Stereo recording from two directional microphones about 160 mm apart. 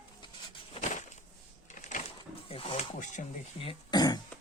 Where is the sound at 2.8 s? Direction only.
50° left (ahead or behind).